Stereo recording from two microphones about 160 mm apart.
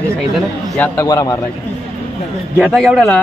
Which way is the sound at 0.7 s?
10° left (ahead or behind).